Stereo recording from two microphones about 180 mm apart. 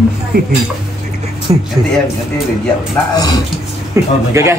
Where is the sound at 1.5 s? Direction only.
30° right (ahead or behind).